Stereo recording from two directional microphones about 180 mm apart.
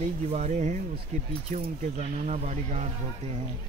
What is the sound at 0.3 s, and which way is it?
Speech, 40° right (ahead or behind).